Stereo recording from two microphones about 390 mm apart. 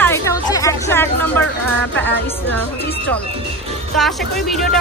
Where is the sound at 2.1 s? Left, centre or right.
Left.